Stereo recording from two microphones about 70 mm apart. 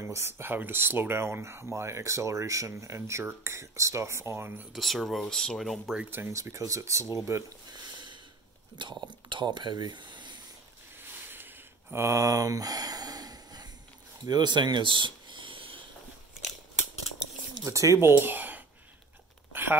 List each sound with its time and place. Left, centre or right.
0.0 s speech: right
4.7 s speech: centre
6.0 s speech: right
6.5 s speech: right
7.7 s sniff: right
9.0 s speech: right
11.0 s a sound: right
12.0 s speech: right
14.2 s speech: right
17.6 s speech: right